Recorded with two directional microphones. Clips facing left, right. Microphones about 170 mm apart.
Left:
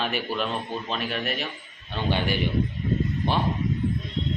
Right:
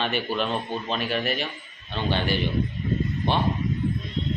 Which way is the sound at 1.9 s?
10° left (ahead or behind).